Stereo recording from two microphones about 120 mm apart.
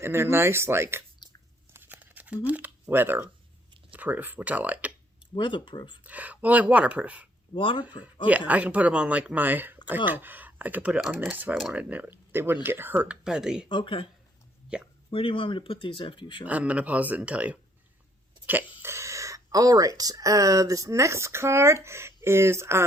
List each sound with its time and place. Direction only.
0.0 s speech: 20° right (ahead or behind)
1.7 s a sound: 15° right (ahead or behind)
3.9 s speech: 15° right (ahead or behind)
5.3 s speech: 40° left (ahead or behind)
6.0 s speech: 10° right (ahead or behind)
7.5 s speech: 45° left (ahead or behind)
8.4 s speech: 10° right (ahead or behind)
13.2 s speech: 5° right (ahead or behind)
13.7 s speech: 45° left (ahead or behind)
14.7 s speech: 10° right (ahead or behind)
15.1 s speech: 45° left (ahead or behind)
16.5 s speech: 10° right (ahead or behind)
18.8 s speech: 25° right (ahead or behind)